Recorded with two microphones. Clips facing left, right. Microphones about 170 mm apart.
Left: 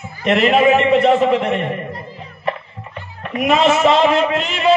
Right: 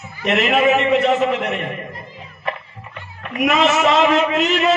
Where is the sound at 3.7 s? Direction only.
30° left (ahead or behind).